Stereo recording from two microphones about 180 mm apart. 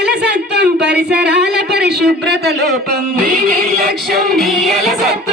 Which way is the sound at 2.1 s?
65° right (ahead or behind).